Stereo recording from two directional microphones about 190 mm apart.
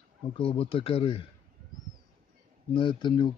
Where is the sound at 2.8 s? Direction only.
25° left (ahead or behind).